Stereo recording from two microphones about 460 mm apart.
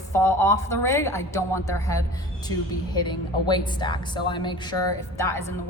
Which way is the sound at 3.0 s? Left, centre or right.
Centre.